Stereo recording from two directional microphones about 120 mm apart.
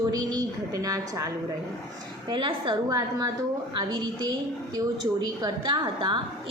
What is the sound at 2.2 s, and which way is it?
Speech, 45° right (ahead or behind).